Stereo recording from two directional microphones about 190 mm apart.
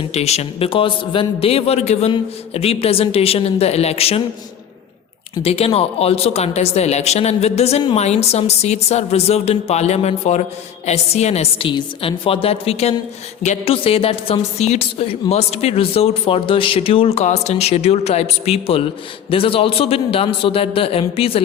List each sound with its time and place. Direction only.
0.0 s a woman's voice: 35° left (ahead or behind)
5.4 s a woman's voice: 30° left (ahead or behind)